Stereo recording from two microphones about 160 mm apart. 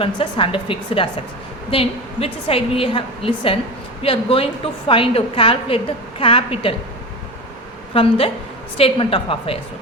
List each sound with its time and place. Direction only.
0.0 s a woman's voice: 35° left (ahead or behind)
7.9 s a woman's voice: 35° left (ahead or behind)